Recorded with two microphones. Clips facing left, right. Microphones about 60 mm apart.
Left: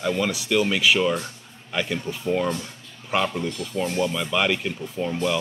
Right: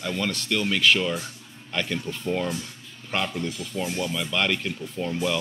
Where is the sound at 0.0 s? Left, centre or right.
Centre.